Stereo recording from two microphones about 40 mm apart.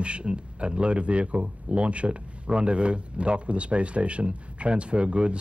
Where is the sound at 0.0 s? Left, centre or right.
Right.